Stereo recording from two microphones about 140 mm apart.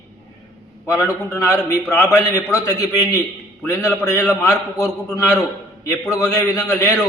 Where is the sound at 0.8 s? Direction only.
20° left (ahead or behind).